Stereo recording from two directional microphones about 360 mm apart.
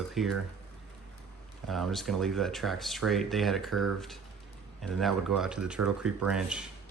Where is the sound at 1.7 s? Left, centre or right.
Centre.